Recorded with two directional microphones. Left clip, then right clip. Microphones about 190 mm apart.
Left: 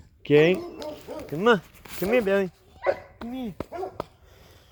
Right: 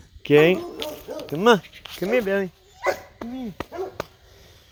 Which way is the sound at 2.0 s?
20° left (ahead or behind).